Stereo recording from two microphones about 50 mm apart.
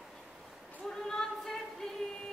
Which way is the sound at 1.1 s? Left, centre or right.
Centre.